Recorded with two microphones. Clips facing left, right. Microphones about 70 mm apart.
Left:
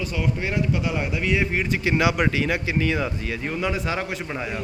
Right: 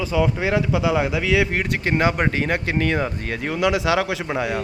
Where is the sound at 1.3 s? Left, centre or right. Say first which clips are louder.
Right 1 dB; right.